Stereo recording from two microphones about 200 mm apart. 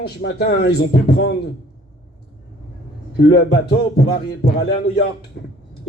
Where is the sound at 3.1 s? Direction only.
55° left (ahead or behind).